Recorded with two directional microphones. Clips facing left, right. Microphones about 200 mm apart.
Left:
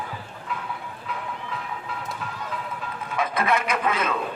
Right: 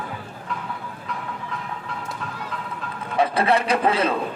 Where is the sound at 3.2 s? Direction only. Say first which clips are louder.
Right 5 dB; 30° right (ahead or behind).